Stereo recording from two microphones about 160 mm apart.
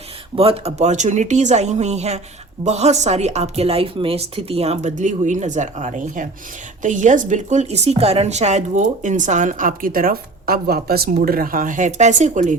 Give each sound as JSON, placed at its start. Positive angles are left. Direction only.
{"t": 0.3, "sound": "a woman's voice", "side_deg": -40}
{"t": 11.1, "sound": "a woman's voice", "side_deg": -65}